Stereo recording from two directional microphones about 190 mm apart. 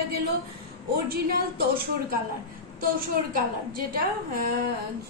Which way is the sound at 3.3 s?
50° right (ahead or behind).